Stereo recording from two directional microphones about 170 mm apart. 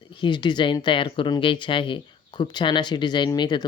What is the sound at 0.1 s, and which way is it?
Speech, 25° left (ahead or behind).